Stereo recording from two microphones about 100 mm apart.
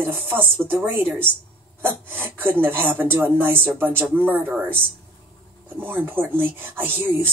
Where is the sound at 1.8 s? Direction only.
20° right (ahead or behind).